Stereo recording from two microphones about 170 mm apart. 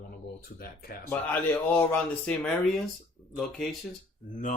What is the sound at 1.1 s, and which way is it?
A man's voice, 10° left (ahead or behind).